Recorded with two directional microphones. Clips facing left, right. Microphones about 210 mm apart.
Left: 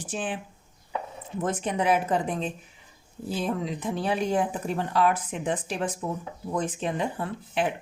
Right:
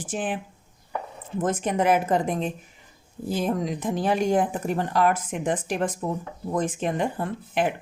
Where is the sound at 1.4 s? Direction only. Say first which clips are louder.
Right 3 dB; 50° right (ahead or behind).